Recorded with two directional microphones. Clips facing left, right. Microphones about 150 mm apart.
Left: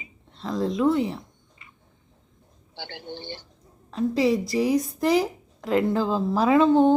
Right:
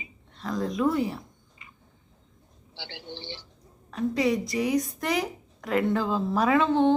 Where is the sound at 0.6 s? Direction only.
25° left (ahead or behind).